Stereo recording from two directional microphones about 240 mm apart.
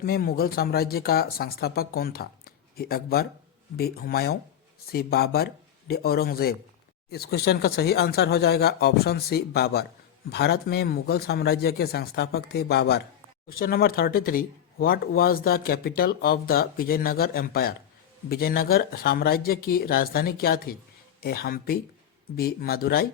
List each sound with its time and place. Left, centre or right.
0.0 s speech: left